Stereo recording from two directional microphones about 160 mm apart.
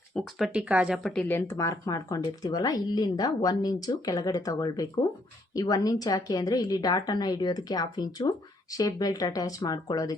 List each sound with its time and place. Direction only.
0.1 s speech: centre (ahead or behind); by 10.2 s 20° left (ahead or behind)